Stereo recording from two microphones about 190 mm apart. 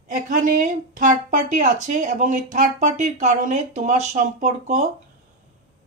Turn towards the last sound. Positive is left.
turn(degrees=-40)  # may be behind; listen again after turning